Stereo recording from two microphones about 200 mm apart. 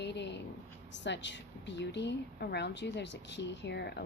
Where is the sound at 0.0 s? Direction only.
60° left (ahead or behind).